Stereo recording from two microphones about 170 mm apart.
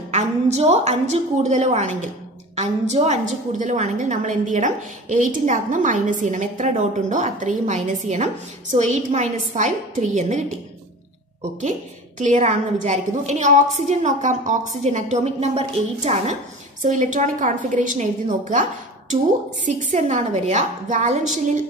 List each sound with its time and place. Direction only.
0.1 s a woman's voice: 40° right (ahead or behind)
12.2 s a woman's voice: 45° right (ahead or behind)